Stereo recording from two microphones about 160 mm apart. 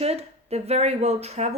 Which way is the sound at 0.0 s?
40° right (ahead or behind).